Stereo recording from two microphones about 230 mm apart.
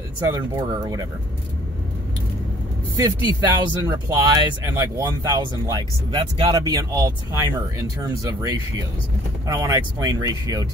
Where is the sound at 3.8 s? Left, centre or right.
Centre.